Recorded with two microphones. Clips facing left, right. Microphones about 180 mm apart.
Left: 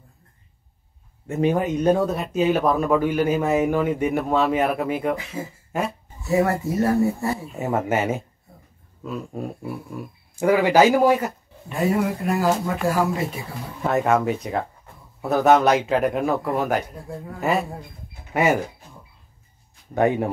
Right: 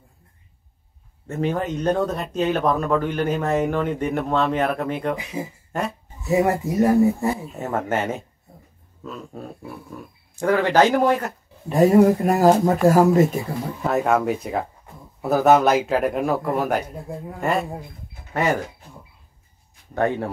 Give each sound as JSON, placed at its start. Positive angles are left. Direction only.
{"t": 1.2, "sound": "speech", "side_deg": 15}
{"t": 5.1, "sound": "speech", "side_deg": -15}
{"t": 5.7, "sound": "a sound", "side_deg": 5}
{"t": 6.2, "sound": "speech", "side_deg": -15}
{"t": 7.5, "sound": "speech", "side_deg": 10}
{"t": 11.7, "sound": "speech", "side_deg": -40}
{"t": 13.8, "sound": "speech", "side_deg": 0}
{"t": 19.9, "sound": "speech", "side_deg": 15}